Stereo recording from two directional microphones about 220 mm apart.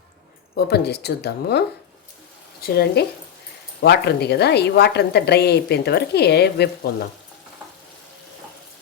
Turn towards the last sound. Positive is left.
turn(degrees=50)  # may be behind; listen again after turning